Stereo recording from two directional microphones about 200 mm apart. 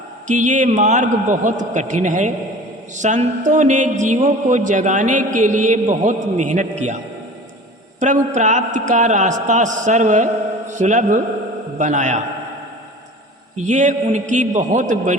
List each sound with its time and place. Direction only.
0.3 s speech: 40° right (ahead or behind)
7.9 s speech: 35° right (ahead or behind)
13.7 s speech: 35° right (ahead or behind)